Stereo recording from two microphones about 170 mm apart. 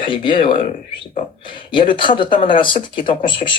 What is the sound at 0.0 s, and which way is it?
A man's voice, 30° left (ahead or behind).